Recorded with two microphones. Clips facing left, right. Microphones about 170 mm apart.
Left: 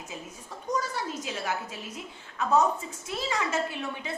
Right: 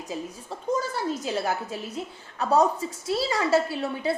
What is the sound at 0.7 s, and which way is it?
A woman's voice, 30° right (ahead or behind).